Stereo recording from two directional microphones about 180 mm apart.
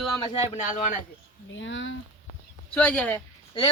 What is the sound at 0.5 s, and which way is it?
Speech, 45° left (ahead or behind).